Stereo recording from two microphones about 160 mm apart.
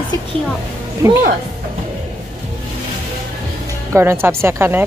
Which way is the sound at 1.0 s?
20° right (ahead or behind).